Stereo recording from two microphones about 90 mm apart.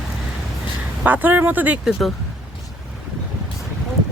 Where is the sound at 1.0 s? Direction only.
20° right (ahead or behind); by 2.1 s 5° right (ahead or behind).